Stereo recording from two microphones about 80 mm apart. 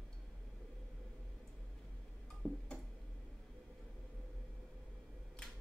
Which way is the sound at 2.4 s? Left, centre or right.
Centre.